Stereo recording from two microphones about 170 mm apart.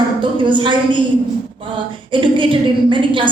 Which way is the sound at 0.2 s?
30° right (ahead or behind).